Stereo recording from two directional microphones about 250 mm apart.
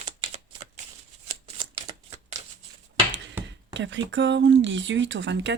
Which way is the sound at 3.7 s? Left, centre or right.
Right.